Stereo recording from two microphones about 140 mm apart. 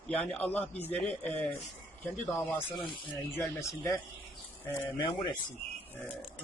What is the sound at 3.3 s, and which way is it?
Speech, 20° left (ahead or behind).